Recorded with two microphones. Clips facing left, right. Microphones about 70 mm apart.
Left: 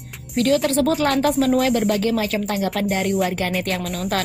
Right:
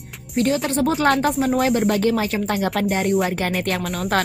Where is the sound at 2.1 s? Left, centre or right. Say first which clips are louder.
Even; right.